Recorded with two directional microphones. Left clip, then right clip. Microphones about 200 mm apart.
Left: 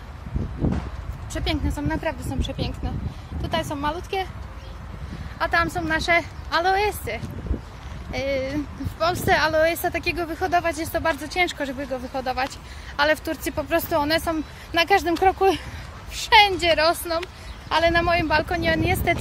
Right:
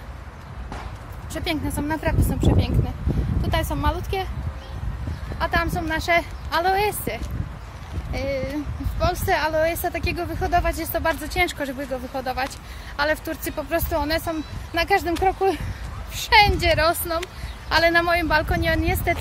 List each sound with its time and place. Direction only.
1.3 s speech: 10° left (ahead or behind)
5.4 s speech: 15° left (ahead or behind)
8.1 s speech: 25° left (ahead or behind)